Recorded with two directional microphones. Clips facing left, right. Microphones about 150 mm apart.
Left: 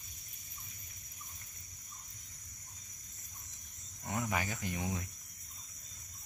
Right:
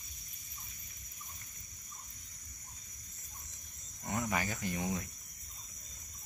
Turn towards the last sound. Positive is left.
turn(degrees=15)  # may be behind; listen again after turning